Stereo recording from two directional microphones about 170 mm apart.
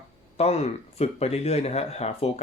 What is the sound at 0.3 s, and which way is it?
Speech, 40° left (ahead or behind).